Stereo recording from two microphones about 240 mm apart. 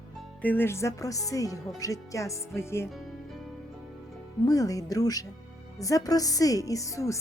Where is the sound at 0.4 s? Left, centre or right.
Centre.